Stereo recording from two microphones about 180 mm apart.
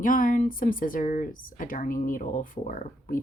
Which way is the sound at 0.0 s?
50° left (ahead or behind).